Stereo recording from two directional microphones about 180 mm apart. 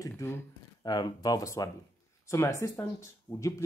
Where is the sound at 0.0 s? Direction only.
15° left (ahead or behind).